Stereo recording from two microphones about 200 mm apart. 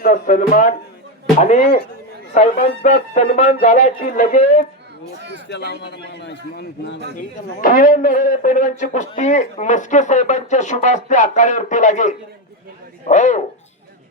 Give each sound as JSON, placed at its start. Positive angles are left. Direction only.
{"t": 0.1, "sound": "a man's voice", "side_deg": 40}
{"t": 5.5, "sound": "a man's voice", "side_deg": 55}
{"t": 7.6, "sound": "a man's voice", "side_deg": 45}